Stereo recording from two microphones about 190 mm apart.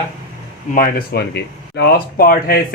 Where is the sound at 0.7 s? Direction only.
50° left (ahead or behind).